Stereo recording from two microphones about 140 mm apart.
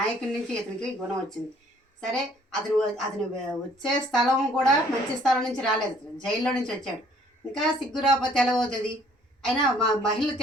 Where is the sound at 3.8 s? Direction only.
5° left (ahead or behind).